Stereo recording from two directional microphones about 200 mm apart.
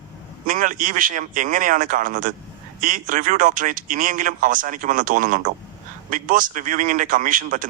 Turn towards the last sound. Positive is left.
turn(degrees=-40)  # may be behind; listen again after turning